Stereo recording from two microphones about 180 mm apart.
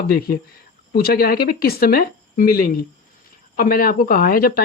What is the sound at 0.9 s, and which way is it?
Speech, 60° left (ahead or behind).